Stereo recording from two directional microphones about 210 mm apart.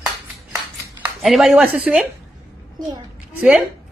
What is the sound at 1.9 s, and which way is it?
Speech, 5° right (ahead or behind).